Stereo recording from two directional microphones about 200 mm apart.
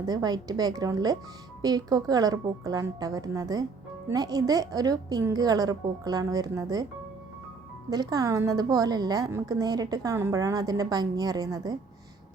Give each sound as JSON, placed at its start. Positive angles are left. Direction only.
{"t": 0.0, "sound": "a woman's voice", "side_deg": -20}
{"t": 7.9, "sound": "a woman's voice", "side_deg": -20}